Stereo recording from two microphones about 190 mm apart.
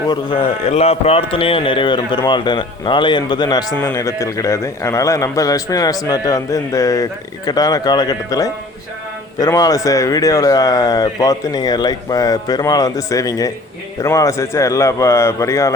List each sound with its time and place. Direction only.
0.1 s a man's voice: 30° left (ahead or behind)